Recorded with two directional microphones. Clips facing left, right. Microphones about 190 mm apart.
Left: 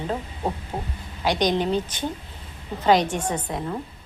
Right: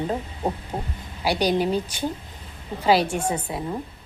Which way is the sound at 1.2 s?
10° right (ahead or behind).